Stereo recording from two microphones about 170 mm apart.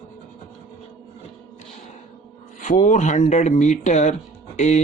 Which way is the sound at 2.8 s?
45° left (ahead or behind).